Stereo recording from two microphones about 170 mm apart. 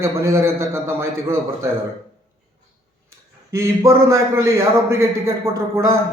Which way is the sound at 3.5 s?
15° right (ahead or behind).